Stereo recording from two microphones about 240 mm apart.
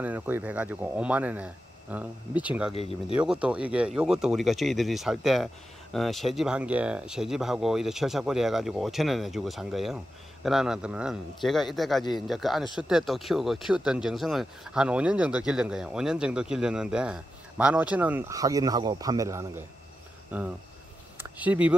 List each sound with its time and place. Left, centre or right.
0.0 s speech: centre
2.7 s speech: left
3.2 s speech: centre